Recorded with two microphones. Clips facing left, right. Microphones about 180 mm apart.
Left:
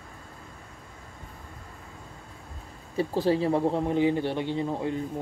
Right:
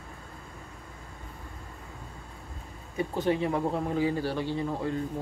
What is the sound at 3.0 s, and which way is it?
A man's voice, 30° left (ahead or behind).